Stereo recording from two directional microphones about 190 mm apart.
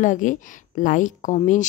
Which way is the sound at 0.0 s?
40° left (ahead or behind).